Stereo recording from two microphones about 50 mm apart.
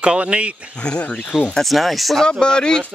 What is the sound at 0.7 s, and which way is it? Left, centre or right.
Speech, left.